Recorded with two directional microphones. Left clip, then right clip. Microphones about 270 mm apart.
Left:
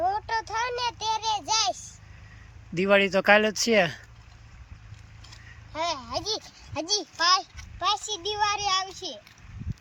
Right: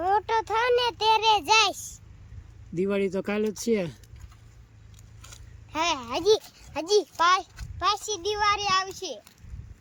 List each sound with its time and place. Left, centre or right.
0.2 s a sound: centre
0.6 s child singing: right
0.9 s child singing: centre
1.3 s child singing: right
2.7 s a child's voice: centre
5.7 s a child's voice: centre
7.8 s a child's voice: centre